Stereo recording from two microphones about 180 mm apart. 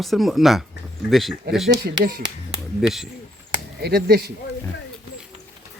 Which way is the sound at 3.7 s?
60° right (ahead or behind).